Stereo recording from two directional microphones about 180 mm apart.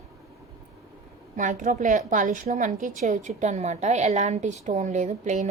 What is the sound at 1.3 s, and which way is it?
A woman's voice, 45° right (ahead or behind).